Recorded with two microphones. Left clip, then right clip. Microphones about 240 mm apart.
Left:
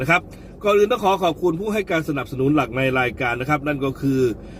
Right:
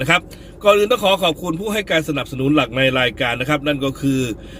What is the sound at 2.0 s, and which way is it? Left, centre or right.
Speech, centre.